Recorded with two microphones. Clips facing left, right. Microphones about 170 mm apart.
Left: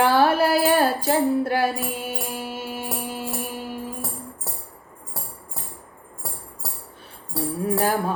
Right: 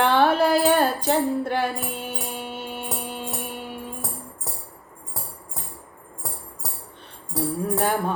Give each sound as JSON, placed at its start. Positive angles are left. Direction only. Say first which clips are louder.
{"t": 0.0, "sound": "music", "louder": "left 1 dB", "side_deg": 5}
{"t": 7.6, "sound": "music", "louder": "left 2 dB", "side_deg": 5}